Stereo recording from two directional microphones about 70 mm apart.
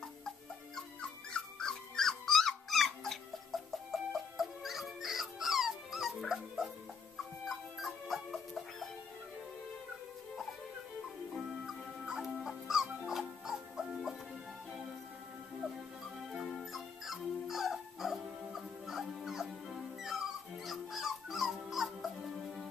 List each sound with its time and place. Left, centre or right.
0.7 s dog: centre
3.5 s chicken: centre
3.9 s dog: centre
7.4 s music: centre
11.6 s music: centre
16.4 s music: centre
20.6 s dog: centre